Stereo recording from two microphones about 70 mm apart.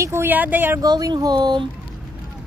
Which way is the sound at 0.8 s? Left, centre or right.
Right.